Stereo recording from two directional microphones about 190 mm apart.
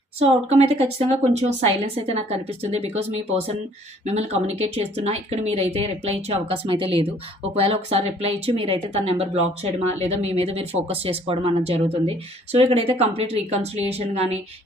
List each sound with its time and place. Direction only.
0.2 s speech: 30° right (ahead or behind)
4.0 s speech: 35° right (ahead or behind)